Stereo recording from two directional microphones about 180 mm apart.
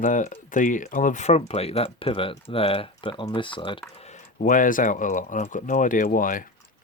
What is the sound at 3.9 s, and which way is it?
Speech, 40° left (ahead or behind).